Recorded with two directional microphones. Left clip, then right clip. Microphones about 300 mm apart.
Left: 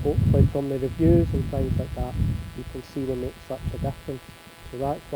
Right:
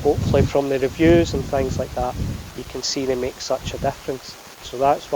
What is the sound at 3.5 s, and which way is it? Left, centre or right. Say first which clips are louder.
Speech: right 12 dB; right.